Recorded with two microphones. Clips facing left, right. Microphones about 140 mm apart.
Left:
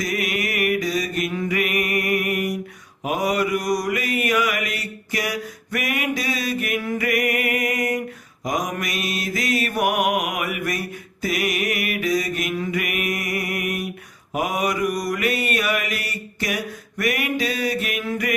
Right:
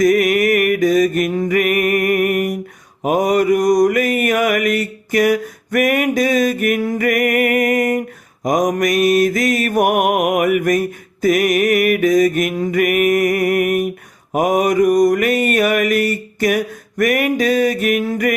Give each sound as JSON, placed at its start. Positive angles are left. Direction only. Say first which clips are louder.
{"t": 0.0, "sound": "mantra", "louder": "right 12 dB", "side_deg": -50}